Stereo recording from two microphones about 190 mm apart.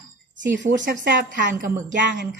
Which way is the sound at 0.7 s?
40° right (ahead or behind).